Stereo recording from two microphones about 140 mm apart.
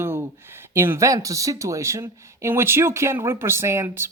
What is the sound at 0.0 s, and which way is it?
Speech, 15° right (ahead or behind).